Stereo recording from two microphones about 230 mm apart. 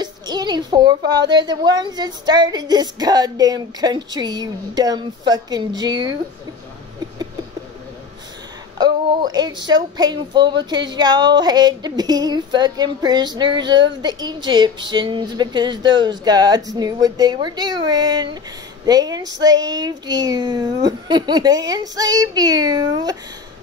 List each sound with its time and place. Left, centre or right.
0.0 s a child's voice: centre
8.7 s a child's voice: centre